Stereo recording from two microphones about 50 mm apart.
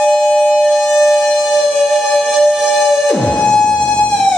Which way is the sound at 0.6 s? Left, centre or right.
Centre.